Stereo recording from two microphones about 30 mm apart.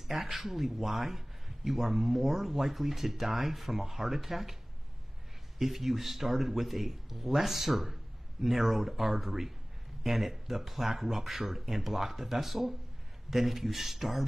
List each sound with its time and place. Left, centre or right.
0.1 s speech: centre
5.6 s speech: centre